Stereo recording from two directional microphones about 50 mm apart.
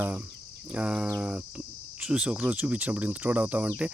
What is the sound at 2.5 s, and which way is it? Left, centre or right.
Cricket, right.